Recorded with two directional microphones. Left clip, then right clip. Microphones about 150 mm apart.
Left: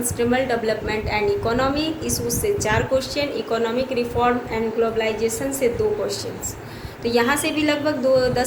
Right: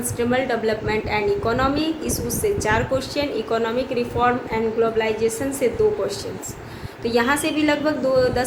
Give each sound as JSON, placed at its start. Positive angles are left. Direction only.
{"t": 0.2, "sound": "a woman's voice", "side_deg": -60}